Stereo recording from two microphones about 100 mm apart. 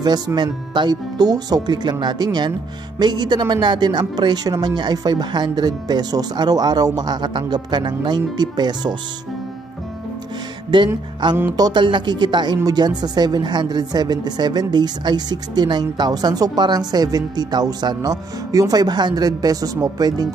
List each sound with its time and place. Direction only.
0.0 s a woman's voice: 45° right (ahead or behind)
10.7 s a woman's voice: 50° right (ahead or behind)